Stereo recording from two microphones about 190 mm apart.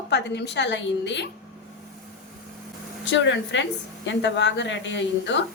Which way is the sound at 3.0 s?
70° left (ahead or behind).